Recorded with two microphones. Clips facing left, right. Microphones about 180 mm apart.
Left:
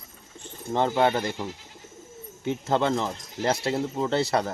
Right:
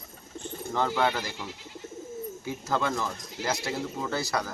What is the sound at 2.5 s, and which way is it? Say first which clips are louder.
Speech: left 6 dB; 25° left (ahead or behind).